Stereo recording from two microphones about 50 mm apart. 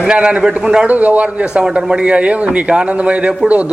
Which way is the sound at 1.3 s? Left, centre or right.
Right.